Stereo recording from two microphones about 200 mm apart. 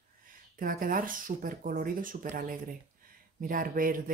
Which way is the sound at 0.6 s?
45° right (ahead or behind).